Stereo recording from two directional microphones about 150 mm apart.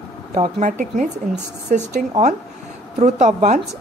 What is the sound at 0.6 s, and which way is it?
A woman's voice, 55° right (ahead or behind).